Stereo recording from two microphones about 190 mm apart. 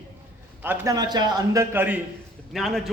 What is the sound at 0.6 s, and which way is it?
A man's voice, 15° right (ahead or behind).